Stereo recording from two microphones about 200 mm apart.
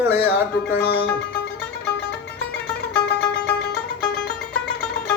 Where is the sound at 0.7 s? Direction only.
60° left (ahead or behind).